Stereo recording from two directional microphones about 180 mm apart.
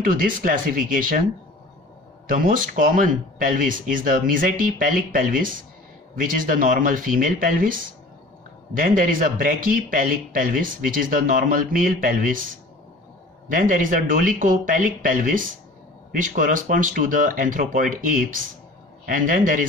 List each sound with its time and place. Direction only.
0.0 s speech: 50° right (ahead or behind)
2.2 s speech: 50° right (ahead or behind)
13.5 s speech: 50° right (ahead or behind)